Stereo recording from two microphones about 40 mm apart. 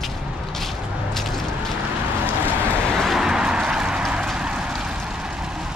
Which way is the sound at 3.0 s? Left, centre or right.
Centre.